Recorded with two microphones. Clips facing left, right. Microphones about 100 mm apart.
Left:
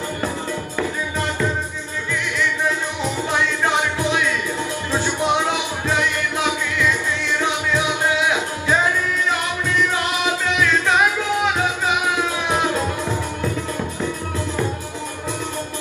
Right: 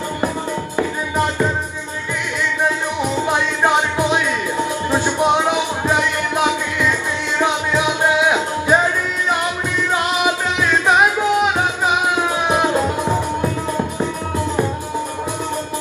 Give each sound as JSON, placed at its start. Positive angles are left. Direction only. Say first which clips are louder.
{"t": 0.7, "sound": "music", "louder": "right 5 dB", "side_deg": -20}
{"t": 3.0, "sound": "music", "louder": "right 4 dB", "side_deg": -20}